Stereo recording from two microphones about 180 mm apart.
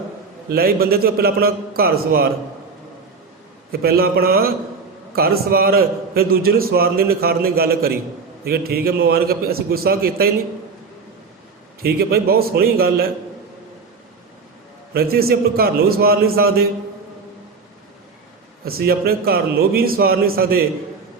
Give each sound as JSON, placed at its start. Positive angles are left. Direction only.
{"t": 0.5, "sound": "a man's voice", "side_deg": -55}
{"t": 3.7, "sound": "a man's voice", "side_deg": -55}
{"t": 11.8, "sound": "a man's voice", "side_deg": -60}
{"t": 14.9, "sound": "a man's voice", "side_deg": -60}
{"t": 18.6, "sound": "a man's voice", "side_deg": -60}